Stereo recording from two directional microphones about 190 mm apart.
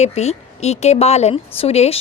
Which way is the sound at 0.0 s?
35° left (ahead or behind).